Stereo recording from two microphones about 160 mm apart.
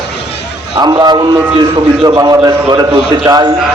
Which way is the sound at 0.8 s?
25° right (ahead or behind).